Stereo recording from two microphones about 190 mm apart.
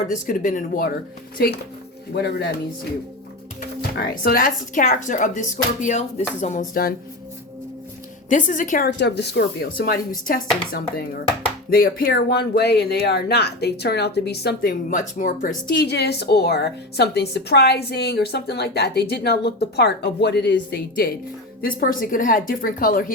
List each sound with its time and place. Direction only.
0.1 s a woman's voice: 45° left (ahead or behind)
1.4 s a woman's voice: 55° left (ahead or behind)
3.8 s a woman's voice: 55° left (ahead or behind)
8.3 s a woman's voice: 45° left (ahead or behind)
9.0 s a woman's voice: 65° left (ahead or behind)
11.7 s a woman's voice: 50° left (ahead or behind)
15.7 s a woman's voice: 65° left (ahead or behind); by 23.1 s 45° left (ahead or behind)